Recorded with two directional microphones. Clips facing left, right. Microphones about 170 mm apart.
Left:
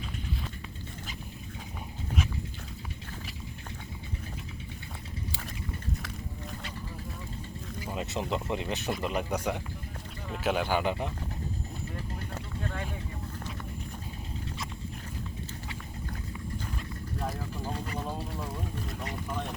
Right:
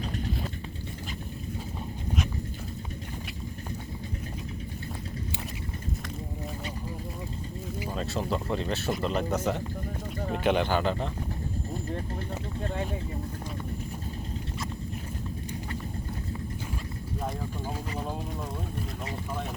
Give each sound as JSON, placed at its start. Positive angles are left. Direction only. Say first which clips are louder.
{"t": 7.9, "sound": "speech", "louder": "right 1 dB", "side_deg": 15}
{"t": 10.2, "sound": "a sound", "louder": "right 7 dB", "side_deg": -45}
{"t": 10.4, "sound": "speech", "louder": "right 2 dB", "side_deg": 5}
{"t": 17.7, "sound": "vehicle", "louder": "even", "side_deg": -10}
{"t": 19.3, "sound": "speech", "louder": "even", "side_deg": -5}